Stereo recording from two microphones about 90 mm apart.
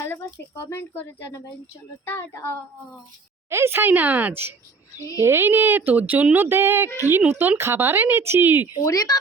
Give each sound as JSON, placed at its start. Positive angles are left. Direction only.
{"t": 0.0, "sound": "speech", "side_deg": 25}
{"t": 3.5, "sound": "speech", "side_deg": -30}
{"t": 8.8, "sound": "speech", "side_deg": 40}